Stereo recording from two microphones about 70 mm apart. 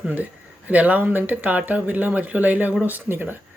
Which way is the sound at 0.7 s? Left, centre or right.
Right.